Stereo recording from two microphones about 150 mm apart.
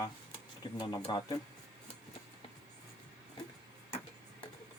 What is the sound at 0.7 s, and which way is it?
Speech, 30° left (ahead or behind).